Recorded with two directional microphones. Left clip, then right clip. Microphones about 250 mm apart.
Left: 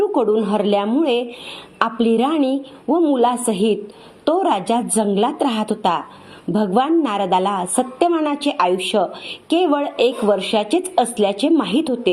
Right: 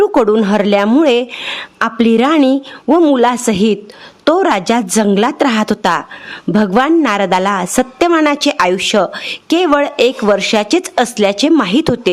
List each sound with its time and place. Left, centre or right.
0.0 s a woman's voice: right
2.8 s a woman's voice: right
7.8 s a woman's voice: right
8.1 s a woman's voice: right